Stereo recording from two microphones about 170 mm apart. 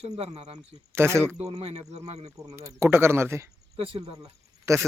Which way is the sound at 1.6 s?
35° right (ahead or behind).